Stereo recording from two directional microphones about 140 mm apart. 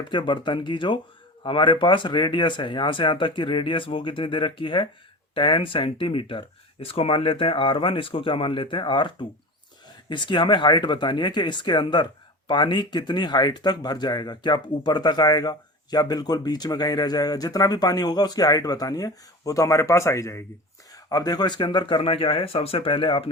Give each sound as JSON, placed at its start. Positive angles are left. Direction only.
{"t": 0.1, "sound": "speech", "side_deg": 35}